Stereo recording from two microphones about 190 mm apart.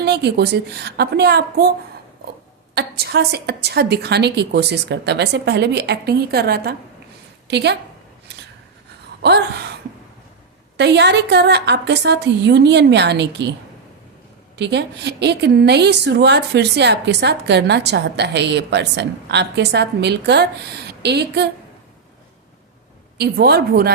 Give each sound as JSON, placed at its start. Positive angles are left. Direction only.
{"t": 0.0, "sound": "a woman's voice", "side_deg": -60}
{"t": 2.7, "sound": "a woman's voice", "side_deg": -60}
{"t": 9.2, "sound": "a woman's voice", "side_deg": -60}
{"t": 10.8, "sound": "a woman's voice", "side_deg": -65}
{"t": 14.5, "sound": "a woman's voice", "side_deg": -65}
{"t": 23.1, "sound": "a woman's voice", "side_deg": -60}